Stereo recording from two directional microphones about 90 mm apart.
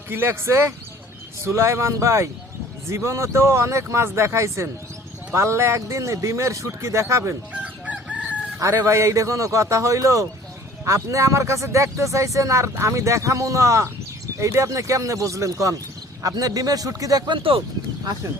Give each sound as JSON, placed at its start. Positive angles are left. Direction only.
{"t": 0.1, "sound": "speech", "side_deg": -25}
{"t": 7.5, "sound": "chicken", "side_deg": -15}
{"t": 8.5, "sound": "speech", "side_deg": -35}
{"t": 17.2, "sound": "speech", "side_deg": -75}